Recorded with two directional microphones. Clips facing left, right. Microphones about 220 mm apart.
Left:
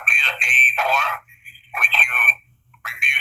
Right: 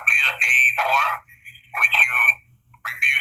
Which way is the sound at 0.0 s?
25° left (ahead or behind).